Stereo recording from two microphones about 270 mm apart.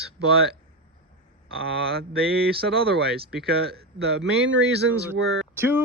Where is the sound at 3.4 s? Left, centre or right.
Right.